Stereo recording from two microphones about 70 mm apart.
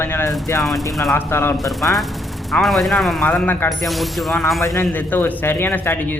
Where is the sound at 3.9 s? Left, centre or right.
Centre.